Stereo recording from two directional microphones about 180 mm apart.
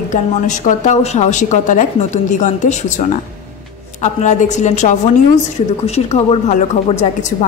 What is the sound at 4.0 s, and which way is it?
A woman's voice, 40° left (ahead or behind).